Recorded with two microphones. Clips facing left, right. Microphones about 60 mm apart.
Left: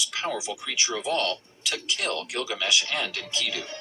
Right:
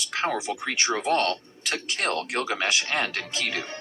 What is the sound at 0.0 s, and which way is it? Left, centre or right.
Speech, right.